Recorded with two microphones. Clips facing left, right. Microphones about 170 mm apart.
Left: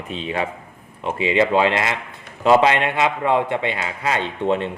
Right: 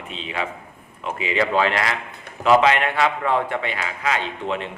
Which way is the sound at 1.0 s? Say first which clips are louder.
Left 4 dB; 25° left (ahead or behind).